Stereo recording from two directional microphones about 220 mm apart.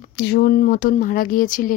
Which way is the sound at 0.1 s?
45° left (ahead or behind).